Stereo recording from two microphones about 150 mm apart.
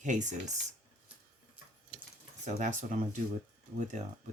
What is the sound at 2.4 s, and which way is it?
Speech, 55° right (ahead or behind).